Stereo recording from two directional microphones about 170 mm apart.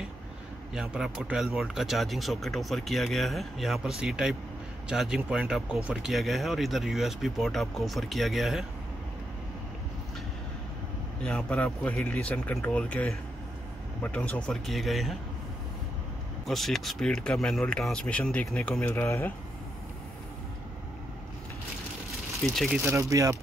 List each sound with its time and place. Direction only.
0.7 s speech: 5° right (ahead or behind)
11.2 s speech: 5° left (ahead or behind)
16.4 s speech: centre (ahead or behind)
22.5 s speech: centre (ahead or behind)
22.8 s speech: 15° right (ahead or behind)